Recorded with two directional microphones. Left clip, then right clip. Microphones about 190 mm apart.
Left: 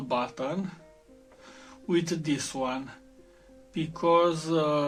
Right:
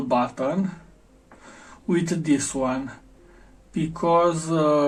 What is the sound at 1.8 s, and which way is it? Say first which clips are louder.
Speech: right 4 dB; 40° left (ahead or behind).